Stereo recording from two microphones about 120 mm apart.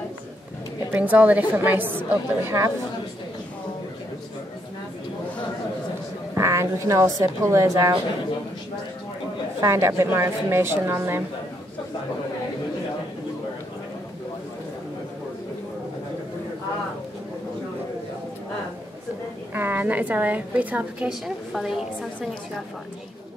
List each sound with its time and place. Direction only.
0.9 s a woman's voice: 15° right (ahead or behind)
6.3 s a woman's voice: 25° right (ahead or behind)
9.6 s a woman's voice: 25° right (ahead or behind)
19.5 s a woman's voice: 20° right (ahead or behind)